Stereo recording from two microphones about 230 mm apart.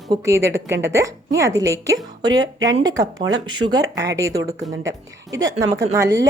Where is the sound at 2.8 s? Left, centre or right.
Centre.